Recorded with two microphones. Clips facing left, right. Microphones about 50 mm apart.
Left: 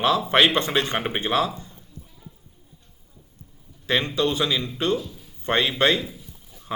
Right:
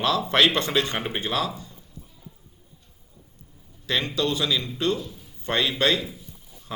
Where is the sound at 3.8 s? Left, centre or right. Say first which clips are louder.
Left 3 dB; left.